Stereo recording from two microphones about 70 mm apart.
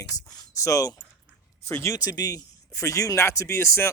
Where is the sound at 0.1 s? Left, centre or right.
Left.